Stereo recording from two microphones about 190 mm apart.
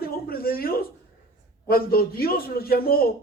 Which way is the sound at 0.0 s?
50° left (ahead or behind).